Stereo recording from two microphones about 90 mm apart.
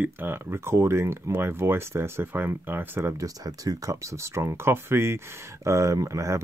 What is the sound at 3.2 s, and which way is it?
Speech, 40° right (ahead or behind).